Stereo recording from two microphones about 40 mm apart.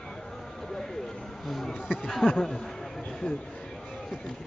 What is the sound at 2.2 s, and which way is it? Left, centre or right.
Speech, left.